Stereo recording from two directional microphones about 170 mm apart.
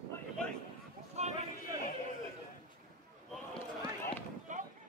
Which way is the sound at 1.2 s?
40° right (ahead or behind).